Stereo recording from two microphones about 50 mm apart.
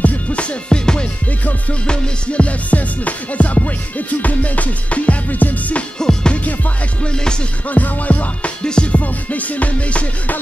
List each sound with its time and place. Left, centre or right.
0.0 s music: left
5.9 s music: centre
7.7 s music: left
8.6 s music: centre
9.0 s music: left